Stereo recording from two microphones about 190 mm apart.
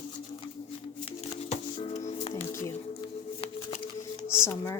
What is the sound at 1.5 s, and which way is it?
Music, 35° left (ahead or behind).